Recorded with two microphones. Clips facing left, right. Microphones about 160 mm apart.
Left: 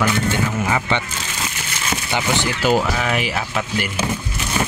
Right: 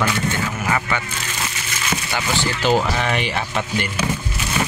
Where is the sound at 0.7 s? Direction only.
25° left (ahead or behind).